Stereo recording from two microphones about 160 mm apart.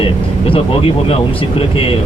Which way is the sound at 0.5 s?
35° left (ahead or behind).